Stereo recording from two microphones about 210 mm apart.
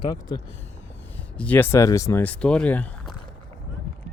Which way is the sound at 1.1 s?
10° left (ahead or behind).